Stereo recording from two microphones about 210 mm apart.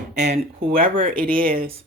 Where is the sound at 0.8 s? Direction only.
25° right (ahead or behind).